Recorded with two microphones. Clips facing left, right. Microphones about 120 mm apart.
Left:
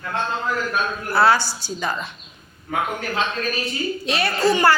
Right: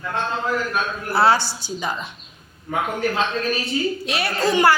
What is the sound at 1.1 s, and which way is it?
Speech, 30° right (ahead or behind).